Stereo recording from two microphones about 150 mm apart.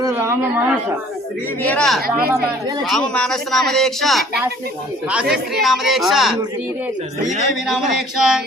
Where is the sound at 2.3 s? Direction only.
25° right (ahead or behind).